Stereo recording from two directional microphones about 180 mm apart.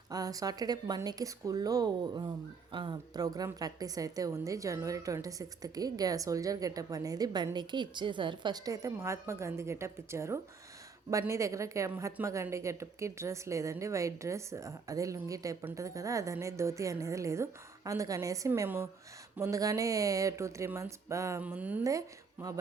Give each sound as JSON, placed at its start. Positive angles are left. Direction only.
{"t": 0.1, "sound": "a woman's voice", "side_deg": -20}